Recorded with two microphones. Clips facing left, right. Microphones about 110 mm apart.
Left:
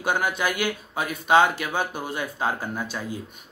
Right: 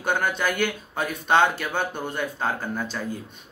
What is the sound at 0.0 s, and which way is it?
Speech, 10° left (ahead or behind).